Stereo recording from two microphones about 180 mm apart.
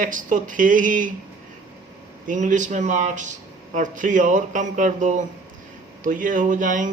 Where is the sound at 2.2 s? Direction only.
45° right (ahead or behind).